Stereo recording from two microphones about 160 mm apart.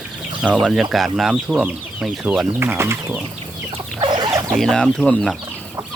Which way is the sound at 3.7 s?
30° right (ahead or behind).